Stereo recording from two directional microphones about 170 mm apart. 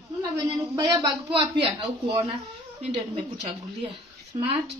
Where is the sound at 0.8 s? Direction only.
20° right (ahead or behind).